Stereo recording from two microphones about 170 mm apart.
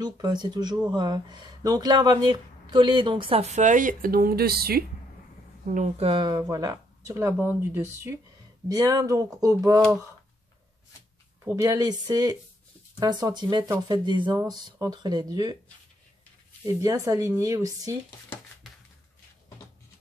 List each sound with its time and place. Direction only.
0.0 s speech: 25° right (ahead or behind); by 4.8 s 65° right (ahead or behind)
5.7 s speech: 45° right (ahead or behind); by 9.8 s 20° right (ahead or behind)
11.4 s speech: 20° right (ahead or behind)
16.6 s speech: 20° right (ahead or behind)